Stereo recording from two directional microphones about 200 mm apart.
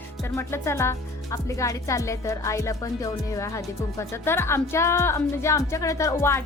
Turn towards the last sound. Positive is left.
turn(degrees=15)  # may be behind; listen again after turning